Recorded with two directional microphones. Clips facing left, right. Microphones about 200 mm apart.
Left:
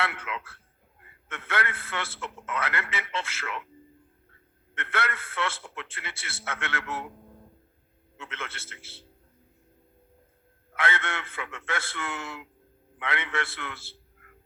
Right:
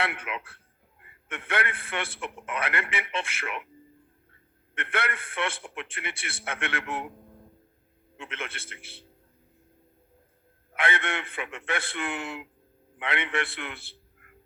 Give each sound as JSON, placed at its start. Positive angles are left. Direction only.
{"t": 0.0, "sound": "a man's voice", "side_deg": -15}
{"t": 4.7, "sound": "a man's voice", "side_deg": -15}
{"t": 8.2, "sound": "a man's voice", "side_deg": -15}
{"t": 10.8, "sound": "a man's voice", "side_deg": -15}